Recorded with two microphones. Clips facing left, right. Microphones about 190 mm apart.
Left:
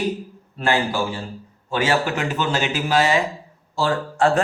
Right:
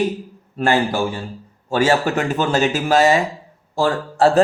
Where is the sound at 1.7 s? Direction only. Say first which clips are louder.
Right 4 dB; 45° right (ahead or behind).